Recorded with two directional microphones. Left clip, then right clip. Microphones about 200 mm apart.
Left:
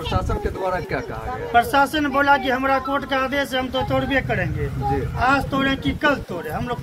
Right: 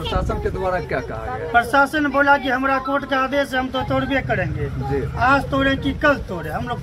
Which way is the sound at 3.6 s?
10° right (ahead or behind).